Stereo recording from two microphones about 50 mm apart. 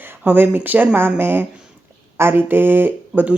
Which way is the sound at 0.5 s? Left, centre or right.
Right.